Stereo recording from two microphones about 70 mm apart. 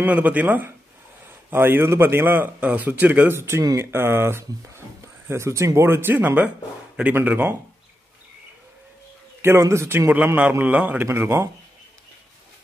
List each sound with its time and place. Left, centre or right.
0.0 s speech: right
9.6 s speech: right
10.1 s speech: right
11.1 s speech: right